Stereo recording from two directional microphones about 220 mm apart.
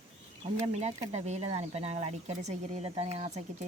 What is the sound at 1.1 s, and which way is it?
Speech, 30° right (ahead or behind).